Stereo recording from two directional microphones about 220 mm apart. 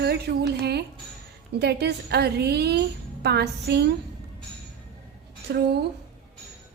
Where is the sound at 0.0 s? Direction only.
45° right (ahead or behind).